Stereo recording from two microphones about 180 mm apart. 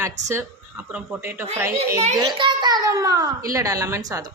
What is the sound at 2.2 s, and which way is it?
A child's voice, 25° right (ahead or behind).